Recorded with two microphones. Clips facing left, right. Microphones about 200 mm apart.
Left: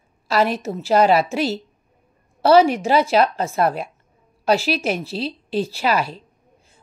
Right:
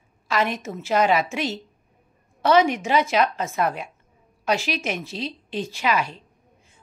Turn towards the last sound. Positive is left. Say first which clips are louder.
# left 3 dB
turn(degrees=35)  # may be behind; listen again after turning